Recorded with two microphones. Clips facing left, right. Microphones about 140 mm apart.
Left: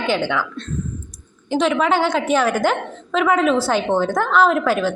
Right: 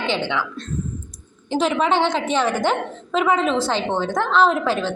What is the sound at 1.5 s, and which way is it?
A woman's voice, centre (ahead or behind).